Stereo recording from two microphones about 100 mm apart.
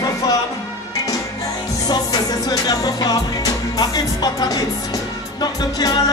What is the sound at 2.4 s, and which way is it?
Music, 40° left (ahead or behind).